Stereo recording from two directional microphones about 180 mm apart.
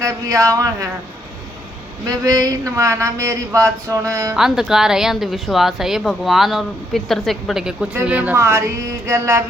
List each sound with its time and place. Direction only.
0.0 s speech: 20° right (ahead or behind)
2.0 s speech: 20° right (ahead or behind)
4.4 s speech: 5° right (ahead or behind)